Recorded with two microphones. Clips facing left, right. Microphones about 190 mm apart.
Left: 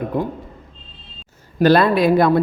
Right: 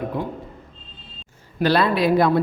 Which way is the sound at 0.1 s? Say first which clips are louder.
Left 7 dB; 50° left (ahead or behind).